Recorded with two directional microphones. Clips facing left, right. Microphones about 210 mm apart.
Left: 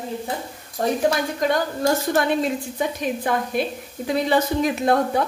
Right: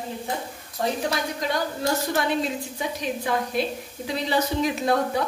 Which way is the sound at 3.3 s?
50° left (ahead or behind).